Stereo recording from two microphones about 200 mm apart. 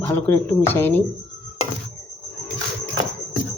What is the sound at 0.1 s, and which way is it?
Speech, 10° left (ahead or behind).